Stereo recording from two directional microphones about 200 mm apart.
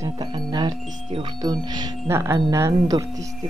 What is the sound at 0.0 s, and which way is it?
Chime, 20° right (ahead or behind).